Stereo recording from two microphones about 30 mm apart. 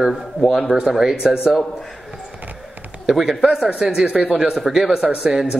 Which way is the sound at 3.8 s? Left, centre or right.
Right.